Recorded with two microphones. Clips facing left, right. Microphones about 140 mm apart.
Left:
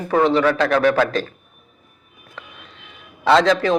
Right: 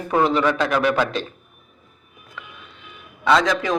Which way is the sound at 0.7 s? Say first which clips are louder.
Left 3 dB; 40° left (ahead or behind).